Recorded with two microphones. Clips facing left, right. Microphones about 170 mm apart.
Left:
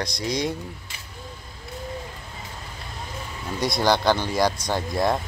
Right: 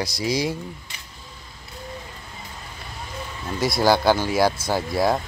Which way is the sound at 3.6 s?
5° right (ahead or behind).